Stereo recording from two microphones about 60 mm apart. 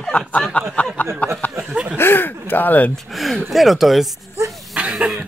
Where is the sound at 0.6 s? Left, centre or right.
Left.